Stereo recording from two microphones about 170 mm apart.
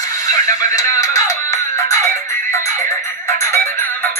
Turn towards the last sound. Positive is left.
turn(degrees=15)  # may be behind; listen again after turning